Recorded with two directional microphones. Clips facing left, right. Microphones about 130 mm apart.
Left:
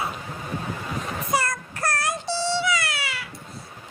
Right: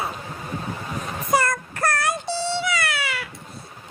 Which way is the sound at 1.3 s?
50° right (ahead or behind).